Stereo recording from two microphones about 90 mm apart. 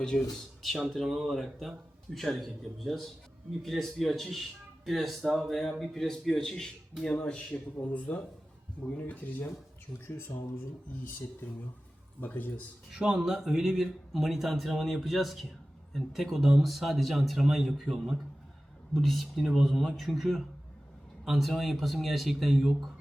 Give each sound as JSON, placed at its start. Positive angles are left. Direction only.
{"t": 0.1, "sound": "speech", "side_deg": 5}
{"t": 12.2, "sound": "speech", "side_deg": 20}
{"t": 12.9, "sound": "speech", "side_deg": -10}